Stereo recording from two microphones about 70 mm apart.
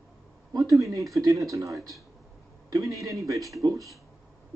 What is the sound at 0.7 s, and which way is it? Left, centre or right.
A woman's voice, right.